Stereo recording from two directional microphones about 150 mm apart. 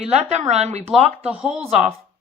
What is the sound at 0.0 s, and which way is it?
Speech, 45° right (ahead or behind).